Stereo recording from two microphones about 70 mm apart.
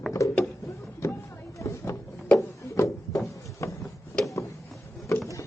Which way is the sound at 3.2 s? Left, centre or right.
Left.